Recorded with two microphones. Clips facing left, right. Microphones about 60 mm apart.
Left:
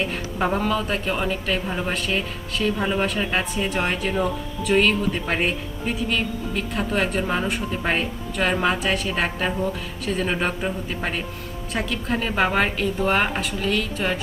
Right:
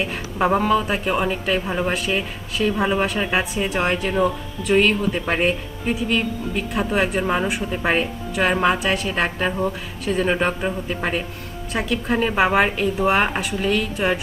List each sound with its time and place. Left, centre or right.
0.0 s speech: centre